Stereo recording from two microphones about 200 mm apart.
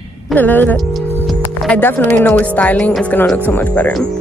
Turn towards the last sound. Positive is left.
turn(degrees=5)  # may be behind; listen again after turning